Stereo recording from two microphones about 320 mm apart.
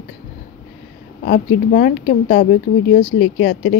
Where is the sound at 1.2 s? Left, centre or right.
Left.